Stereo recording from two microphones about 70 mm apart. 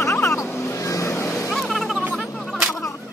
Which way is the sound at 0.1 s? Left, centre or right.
Left.